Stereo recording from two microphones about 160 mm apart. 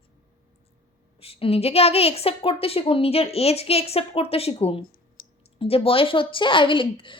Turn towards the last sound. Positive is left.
turn(degrees=30)  # may be behind; listen again after turning